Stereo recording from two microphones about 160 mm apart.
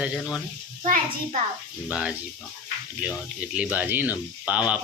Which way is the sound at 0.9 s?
60° right (ahead or behind).